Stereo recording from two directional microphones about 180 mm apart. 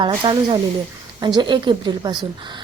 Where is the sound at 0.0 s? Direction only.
25° right (ahead or behind).